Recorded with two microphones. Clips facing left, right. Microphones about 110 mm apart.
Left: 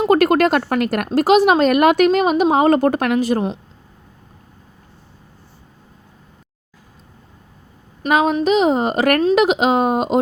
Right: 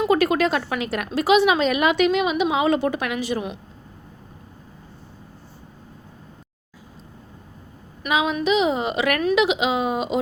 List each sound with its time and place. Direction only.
0.1 s a woman's voice: 55° left (ahead or behind)
8.1 s a woman's voice: 45° left (ahead or behind)